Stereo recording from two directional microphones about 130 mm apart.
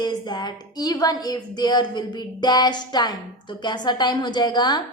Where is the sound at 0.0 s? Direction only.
35° left (ahead or behind).